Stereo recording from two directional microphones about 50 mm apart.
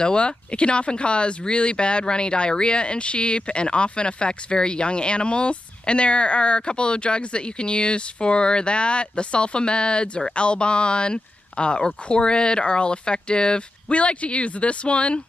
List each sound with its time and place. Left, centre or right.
0.0 s speech: centre